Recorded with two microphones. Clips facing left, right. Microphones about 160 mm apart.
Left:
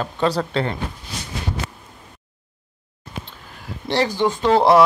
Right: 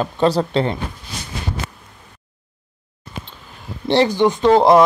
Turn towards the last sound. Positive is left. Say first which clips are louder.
# right 3 dB
turn(degrees=-15)  # may be behind; listen again after turning